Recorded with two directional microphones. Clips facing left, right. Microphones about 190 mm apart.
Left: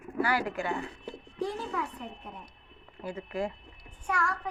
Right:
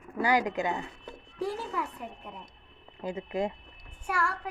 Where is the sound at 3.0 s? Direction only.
20° right (ahead or behind).